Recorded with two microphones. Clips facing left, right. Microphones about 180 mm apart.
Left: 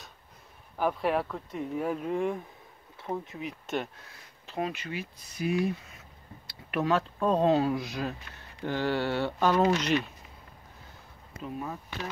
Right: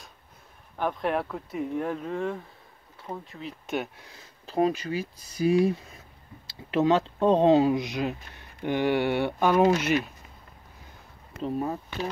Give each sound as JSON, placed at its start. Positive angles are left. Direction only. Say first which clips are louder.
{"t": 0.7, "sound": "speech", "louder": "even", "side_deg": 5}
{"t": 3.6, "sound": "speech", "louder": "right 3 dB", "side_deg": 0}
{"t": 4.5, "sound": "speech", "louder": "right 8 dB", "side_deg": -35}
{"t": 11.4, "sound": "speech", "louder": "right 7 dB", "side_deg": -35}